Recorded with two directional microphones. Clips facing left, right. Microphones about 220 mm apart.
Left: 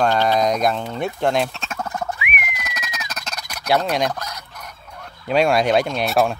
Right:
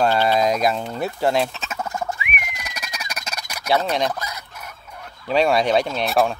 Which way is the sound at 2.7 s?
10° right (ahead or behind).